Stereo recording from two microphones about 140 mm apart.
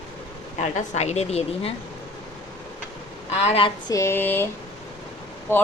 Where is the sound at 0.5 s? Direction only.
60° left (ahead or behind).